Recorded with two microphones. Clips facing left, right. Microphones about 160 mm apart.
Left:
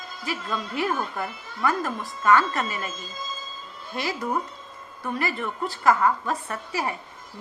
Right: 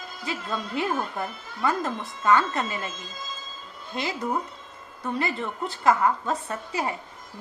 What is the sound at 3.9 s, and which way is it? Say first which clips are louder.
Speech: left 1 dB; 20° right (ahead or behind).